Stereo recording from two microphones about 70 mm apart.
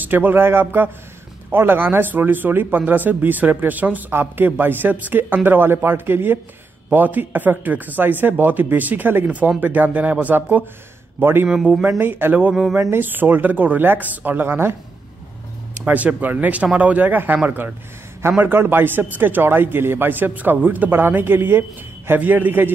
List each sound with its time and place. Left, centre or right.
0.0 s speech: right
11.4 s speech: centre
12.0 s speech: right
14.4 s speech: right
15.8 s speech: right